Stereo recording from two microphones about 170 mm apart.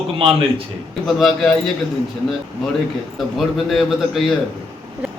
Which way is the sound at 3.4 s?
Centre (ahead or behind).